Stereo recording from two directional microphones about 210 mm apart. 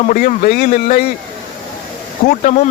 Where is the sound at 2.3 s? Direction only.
35° left (ahead or behind).